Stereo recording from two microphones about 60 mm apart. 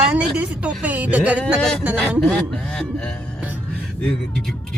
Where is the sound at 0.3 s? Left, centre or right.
Right.